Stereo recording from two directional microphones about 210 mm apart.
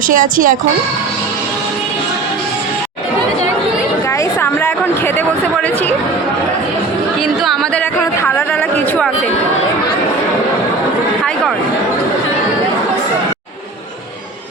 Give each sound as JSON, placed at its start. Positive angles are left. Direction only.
{"t": 0.1, "sound": "speech", "side_deg": -40}
{"t": 4.2, "sound": "a sound", "side_deg": 10}
{"t": 7.4, "sound": "music", "side_deg": 5}